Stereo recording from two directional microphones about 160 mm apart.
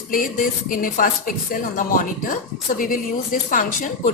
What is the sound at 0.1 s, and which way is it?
A woman's voice, 60° left (ahead or behind).